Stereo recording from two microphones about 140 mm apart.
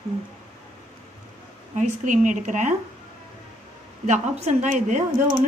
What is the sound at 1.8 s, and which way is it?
Speech, 65° right (ahead or behind).